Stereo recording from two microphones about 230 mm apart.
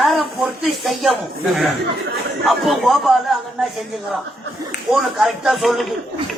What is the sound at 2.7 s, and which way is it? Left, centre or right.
A woman's voice, centre.